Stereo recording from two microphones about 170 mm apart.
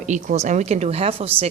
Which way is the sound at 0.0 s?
45° right (ahead or behind).